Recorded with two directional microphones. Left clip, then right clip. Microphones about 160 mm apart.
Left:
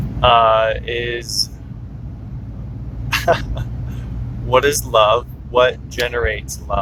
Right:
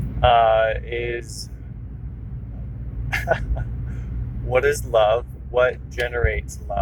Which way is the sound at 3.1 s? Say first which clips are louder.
Left 6 dB; 15° left (ahead or behind).